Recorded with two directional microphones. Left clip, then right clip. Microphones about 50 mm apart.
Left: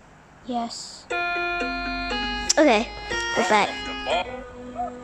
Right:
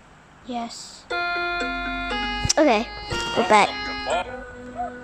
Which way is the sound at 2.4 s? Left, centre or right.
Right.